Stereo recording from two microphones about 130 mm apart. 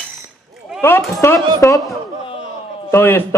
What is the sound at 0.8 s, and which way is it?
A man's voice, 20° left (ahead or behind).